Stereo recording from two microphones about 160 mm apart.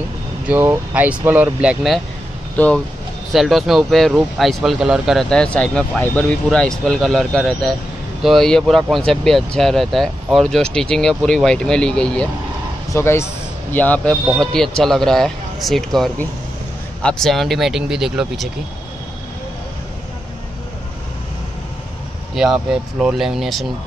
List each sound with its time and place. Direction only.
0.5 s speech: 10° right (ahead or behind)
2.5 s speech: 10° left (ahead or behind)
22.3 s speech: 5° right (ahead or behind)